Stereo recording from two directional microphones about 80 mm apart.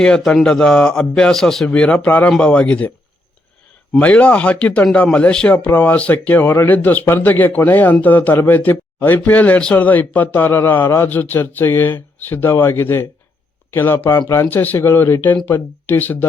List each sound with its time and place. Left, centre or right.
0.0 s a man's voice: centre
1.7 s a man's voice: centre
4.0 s a man's voice: centre